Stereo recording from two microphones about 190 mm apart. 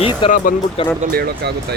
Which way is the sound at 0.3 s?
45° left (ahead or behind).